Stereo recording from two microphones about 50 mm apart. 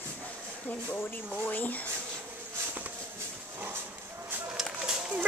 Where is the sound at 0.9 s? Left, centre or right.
Left.